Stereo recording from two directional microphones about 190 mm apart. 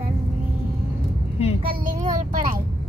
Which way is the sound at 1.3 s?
35° left (ahead or behind).